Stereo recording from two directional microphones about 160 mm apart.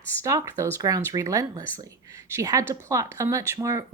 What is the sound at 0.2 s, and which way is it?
Speech, 20° right (ahead or behind).